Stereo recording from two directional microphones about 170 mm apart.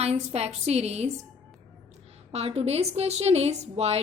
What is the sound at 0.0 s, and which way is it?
A woman's voice, 40° right (ahead or behind).